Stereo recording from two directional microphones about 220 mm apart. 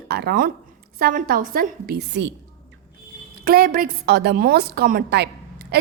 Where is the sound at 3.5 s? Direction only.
45° right (ahead or behind).